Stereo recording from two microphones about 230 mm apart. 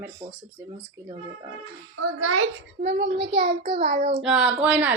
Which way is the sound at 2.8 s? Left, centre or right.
Right.